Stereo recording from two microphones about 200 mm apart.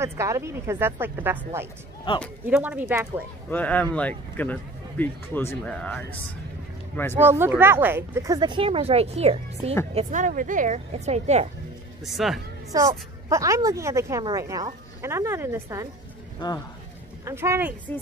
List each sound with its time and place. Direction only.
0.0 s a woman's voice: 15° right (ahead or behind)
2.1 s a man's voice: 25° left (ahead or behind)
2.4 s a woman's voice: 5° right (ahead or behind)
3.4 s speech: 10° left (ahead or behind)
7.2 s a woman's voice: 10° right (ahead or behind); by 11.4 s 35° right (ahead or behind)
12.0 s speech: centre (ahead or behind)
12.7 s a woman's voice: 15° right (ahead or behind)
16.3 s speech: 20° left (ahead or behind)
17.2 s a woman's voice: 15° right (ahead or behind)